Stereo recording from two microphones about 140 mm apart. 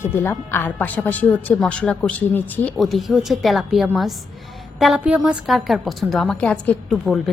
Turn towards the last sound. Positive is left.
turn(degrees=0)  # may be behind; listen again after turning